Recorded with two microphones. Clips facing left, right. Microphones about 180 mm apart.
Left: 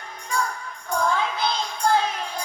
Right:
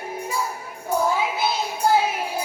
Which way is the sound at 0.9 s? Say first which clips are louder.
Right 2 dB; 5° right (ahead or behind).